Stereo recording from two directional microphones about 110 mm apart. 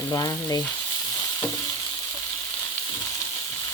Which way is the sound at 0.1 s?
35° left (ahead or behind).